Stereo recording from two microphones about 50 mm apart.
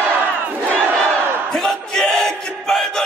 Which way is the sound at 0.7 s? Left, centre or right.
Centre.